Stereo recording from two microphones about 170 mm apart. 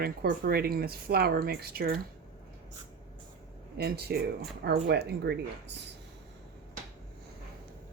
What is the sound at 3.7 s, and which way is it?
Speech, 70° right (ahead or behind).